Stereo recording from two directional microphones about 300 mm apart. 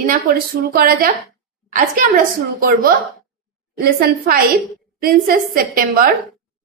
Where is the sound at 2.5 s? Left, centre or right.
Right.